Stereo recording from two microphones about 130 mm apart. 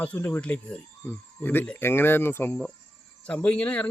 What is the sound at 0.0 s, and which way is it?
Speech, 10° left (ahead or behind).